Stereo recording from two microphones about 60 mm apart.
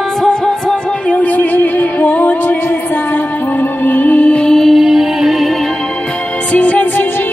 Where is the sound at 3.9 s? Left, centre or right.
Left.